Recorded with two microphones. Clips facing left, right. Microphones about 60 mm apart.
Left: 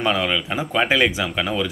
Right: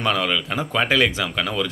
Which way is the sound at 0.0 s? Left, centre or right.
Centre.